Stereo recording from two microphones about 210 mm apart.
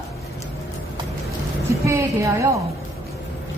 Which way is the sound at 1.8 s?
15° right (ahead or behind).